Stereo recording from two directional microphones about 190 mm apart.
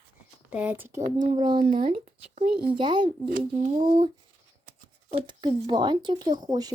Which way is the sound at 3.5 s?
40° right (ahead or behind).